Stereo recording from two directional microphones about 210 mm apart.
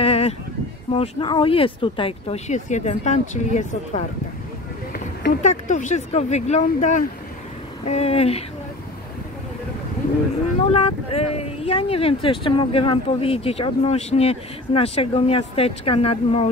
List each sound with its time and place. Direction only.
0.0 s a sound: 30° left (ahead or behind)
0.9 s speech: 25° left (ahead or behind)
5.4 s speech: 35° left (ahead or behind)
10.7 s speech: 25° left (ahead or behind)